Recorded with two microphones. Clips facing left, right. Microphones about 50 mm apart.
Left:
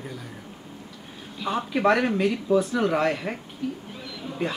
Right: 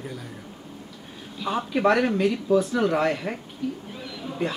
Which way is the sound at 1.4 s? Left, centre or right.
Centre.